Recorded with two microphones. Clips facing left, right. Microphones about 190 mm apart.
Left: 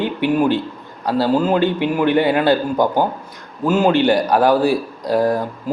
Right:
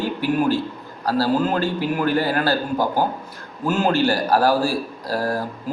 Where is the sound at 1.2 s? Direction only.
20° left (ahead or behind).